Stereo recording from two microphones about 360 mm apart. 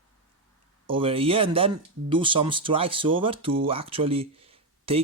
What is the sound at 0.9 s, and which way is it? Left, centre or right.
Speech, centre.